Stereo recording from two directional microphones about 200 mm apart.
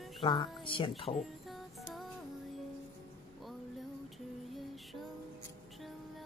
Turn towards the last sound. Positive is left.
turn(degrees=0)  # may be behind; listen again after turning